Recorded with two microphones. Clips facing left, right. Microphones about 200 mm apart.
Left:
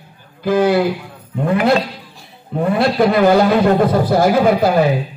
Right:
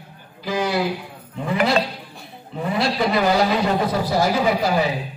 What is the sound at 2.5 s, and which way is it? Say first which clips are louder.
A man's voice: left 7 dB; 55° left (ahead or behind).